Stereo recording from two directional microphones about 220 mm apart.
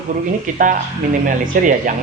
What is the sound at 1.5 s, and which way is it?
Speech, 40° right (ahead or behind).